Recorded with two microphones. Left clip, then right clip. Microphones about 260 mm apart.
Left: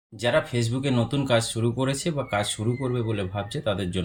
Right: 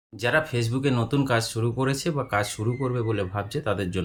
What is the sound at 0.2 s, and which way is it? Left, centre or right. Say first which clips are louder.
Speech: even; centre.